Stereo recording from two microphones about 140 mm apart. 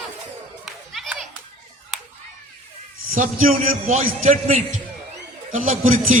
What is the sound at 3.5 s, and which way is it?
Speech, 50° right (ahead or behind).